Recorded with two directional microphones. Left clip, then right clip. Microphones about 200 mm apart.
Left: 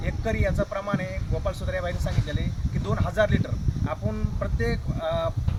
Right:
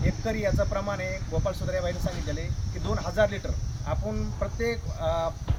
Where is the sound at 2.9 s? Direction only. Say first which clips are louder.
Left 1 dB; centre (ahead or behind).